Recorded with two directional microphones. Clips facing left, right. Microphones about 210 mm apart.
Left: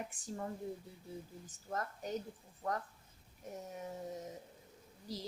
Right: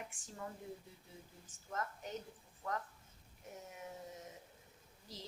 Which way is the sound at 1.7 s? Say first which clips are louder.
Left 4 dB; 35° left (ahead or behind).